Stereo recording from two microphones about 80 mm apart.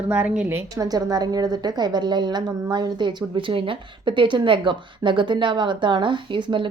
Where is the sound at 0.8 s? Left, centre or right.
Right.